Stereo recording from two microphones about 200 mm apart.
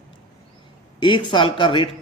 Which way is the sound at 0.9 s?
25° left (ahead or behind).